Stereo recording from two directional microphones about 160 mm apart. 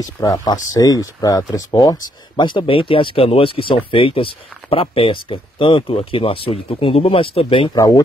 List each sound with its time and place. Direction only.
0.0 s speech: 20° left (ahead or behind)
7.7 s speech: 20° left (ahead or behind)